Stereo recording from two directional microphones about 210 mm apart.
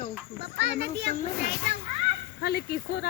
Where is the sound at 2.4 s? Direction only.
50° left (ahead or behind).